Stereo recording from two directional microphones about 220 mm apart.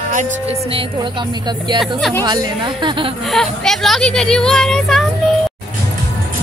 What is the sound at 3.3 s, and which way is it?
Speech, centre (ahead or behind).